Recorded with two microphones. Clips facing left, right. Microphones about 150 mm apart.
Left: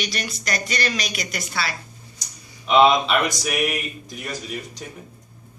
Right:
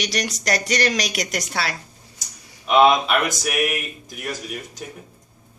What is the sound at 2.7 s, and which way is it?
Speech, 5° right (ahead or behind).